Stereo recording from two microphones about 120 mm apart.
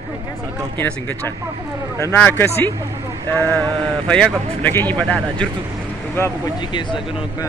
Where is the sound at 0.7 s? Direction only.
15° left (ahead or behind).